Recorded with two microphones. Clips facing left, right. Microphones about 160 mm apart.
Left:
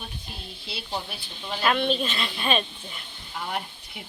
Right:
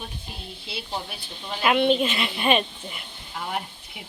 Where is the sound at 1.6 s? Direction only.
15° right (ahead or behind).